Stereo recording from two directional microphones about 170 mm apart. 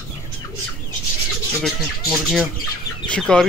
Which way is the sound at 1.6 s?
5° right (ahead or behind).